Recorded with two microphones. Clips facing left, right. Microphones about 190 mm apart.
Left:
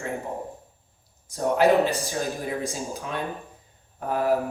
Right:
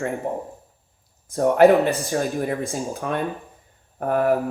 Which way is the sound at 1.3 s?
55° right (ahead or behind).